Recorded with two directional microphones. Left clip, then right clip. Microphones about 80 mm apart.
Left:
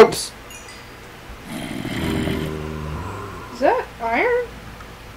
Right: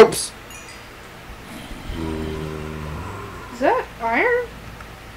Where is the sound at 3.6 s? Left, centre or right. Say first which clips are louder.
Left 1 dB; right.